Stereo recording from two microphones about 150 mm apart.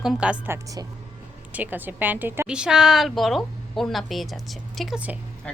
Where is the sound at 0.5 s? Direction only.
25° right (ahead or behind).